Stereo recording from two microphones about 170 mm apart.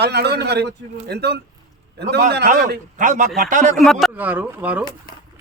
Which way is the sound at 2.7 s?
50° right (ahead or behind).